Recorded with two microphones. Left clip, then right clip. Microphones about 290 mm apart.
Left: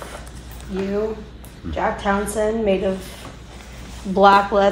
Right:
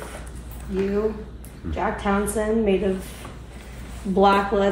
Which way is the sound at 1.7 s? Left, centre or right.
Left.